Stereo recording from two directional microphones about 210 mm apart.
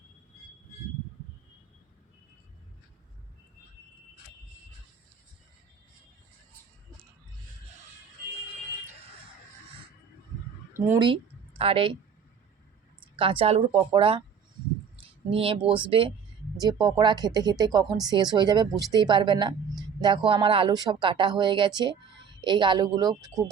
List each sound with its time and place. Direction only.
10.8 s a woman's voice: 15° right (ahead or behind)
13.1 s speech: 25° right (ahead or behind)
15.3 s speech: 25° right (ahead or behind)